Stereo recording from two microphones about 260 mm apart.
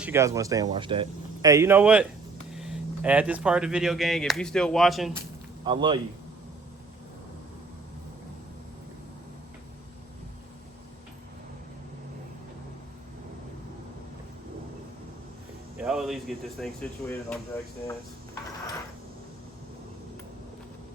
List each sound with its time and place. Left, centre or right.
0.0 s speech: centre
5.6 s speech: centre
15.8 s speech: centre